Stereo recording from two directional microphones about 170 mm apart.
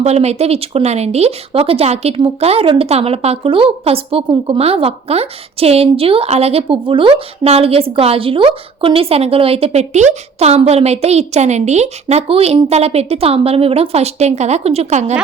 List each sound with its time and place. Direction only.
0.0 s speech: 40° right (ahead or behind)